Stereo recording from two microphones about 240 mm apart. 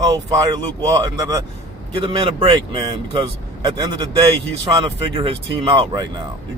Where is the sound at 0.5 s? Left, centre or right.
Centre.